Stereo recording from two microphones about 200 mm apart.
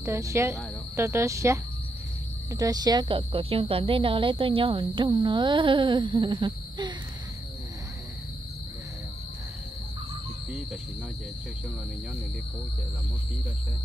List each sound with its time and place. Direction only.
0.0 s speech: 15° right (ahead or behind)